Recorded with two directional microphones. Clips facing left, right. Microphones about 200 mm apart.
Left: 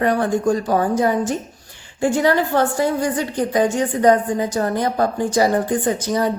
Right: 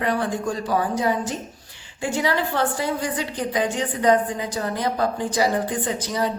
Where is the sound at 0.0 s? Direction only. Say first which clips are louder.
Left 6 dB; 45° left (ahead or behind).